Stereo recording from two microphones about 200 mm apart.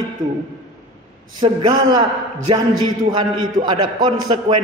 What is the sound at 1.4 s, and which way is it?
A man's voice, 20° right (ahead or behind).